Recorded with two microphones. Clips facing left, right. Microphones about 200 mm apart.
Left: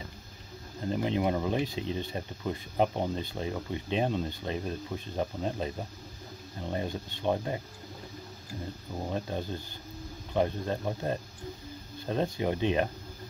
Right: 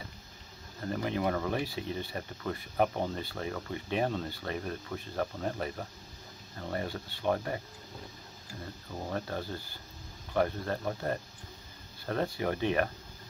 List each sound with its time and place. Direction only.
0.8 s speech: 20° left (ahead or behind)
8.9 s speech: 15° left (ahead or behind)